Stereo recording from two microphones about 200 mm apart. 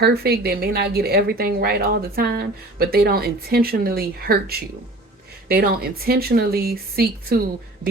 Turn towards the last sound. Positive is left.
turn(degrees=-50)  # may be behind; listen again after turning